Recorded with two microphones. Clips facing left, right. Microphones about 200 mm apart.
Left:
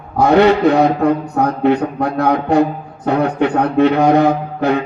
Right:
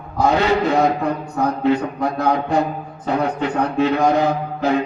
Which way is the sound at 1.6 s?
65° left (ahead or behind).